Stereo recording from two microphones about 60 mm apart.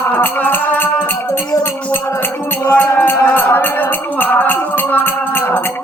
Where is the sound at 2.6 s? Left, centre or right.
Left.